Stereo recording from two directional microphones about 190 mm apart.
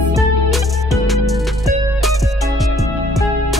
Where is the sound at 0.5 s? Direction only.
Centre (ahead or behind).